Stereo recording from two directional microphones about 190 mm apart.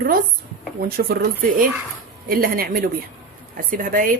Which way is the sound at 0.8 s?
50° right (ahead or behind).